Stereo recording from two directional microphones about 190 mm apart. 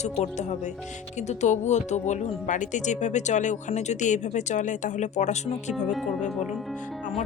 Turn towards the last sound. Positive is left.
turn(degrees=0)  # may be behind; listen again after turning